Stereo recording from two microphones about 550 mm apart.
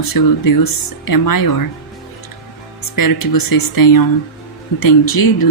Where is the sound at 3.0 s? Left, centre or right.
Left.